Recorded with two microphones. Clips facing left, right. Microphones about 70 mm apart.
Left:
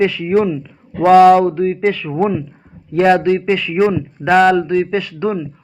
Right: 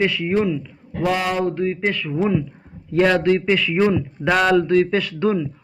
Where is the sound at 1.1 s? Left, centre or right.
Left.